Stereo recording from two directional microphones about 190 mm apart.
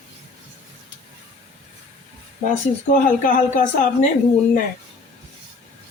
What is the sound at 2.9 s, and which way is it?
Speech, 45° left (ahead or behind).